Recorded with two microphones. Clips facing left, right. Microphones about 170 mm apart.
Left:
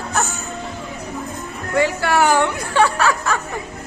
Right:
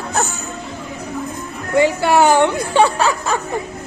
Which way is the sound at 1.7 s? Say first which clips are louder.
Right 4 dB; 20° right (ahead or behind).